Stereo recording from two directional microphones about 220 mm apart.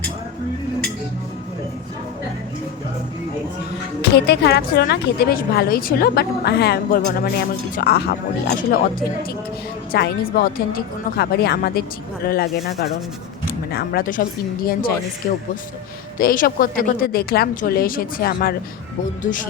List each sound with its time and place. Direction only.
4.0 s a woman's voice: 50° left (ahead or behind)
13.7 s speech: 45° left (ahead or behind)
16.1 s speech: 40° left (ahead or behind)